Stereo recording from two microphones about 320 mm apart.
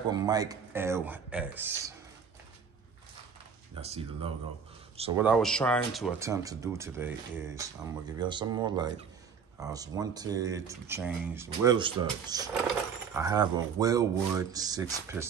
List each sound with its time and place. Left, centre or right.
0.1 s speech: centre
3.8 s speech: centre
5.2 s speech: centre